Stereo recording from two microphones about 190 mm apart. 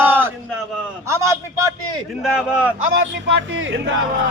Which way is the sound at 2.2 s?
5° right (ahead or behind).